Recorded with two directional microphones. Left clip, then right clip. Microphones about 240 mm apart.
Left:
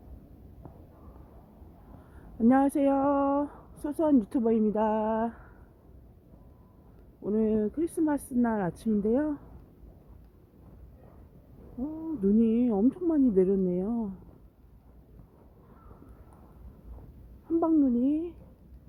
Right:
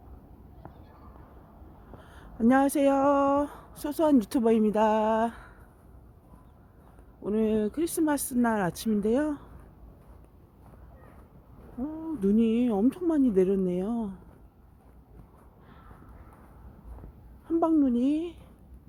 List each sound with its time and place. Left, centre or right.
2.4 s speech: centre
7.3 s speech: centre
11.8 s speech: centre
17.6 s speech: centre